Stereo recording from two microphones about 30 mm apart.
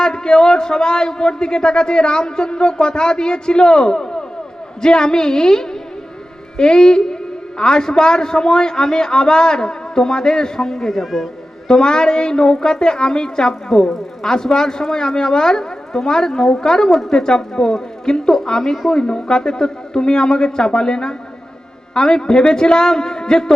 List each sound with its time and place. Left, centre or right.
0.0 s a man's voice: left
11.0 s speech: centre
11.7 s a man's voice: left